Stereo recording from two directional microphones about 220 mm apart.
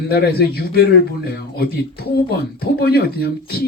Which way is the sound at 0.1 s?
45° left (ahead or behind).